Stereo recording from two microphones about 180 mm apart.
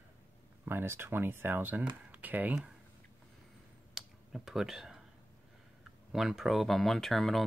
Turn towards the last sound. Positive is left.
turn(degrees=0)  # may be behind; listen again after turning